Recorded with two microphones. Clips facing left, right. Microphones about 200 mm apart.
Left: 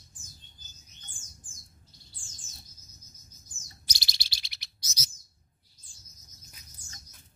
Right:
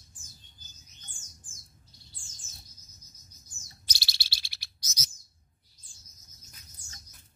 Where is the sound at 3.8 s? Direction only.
15° left (ahead or behind).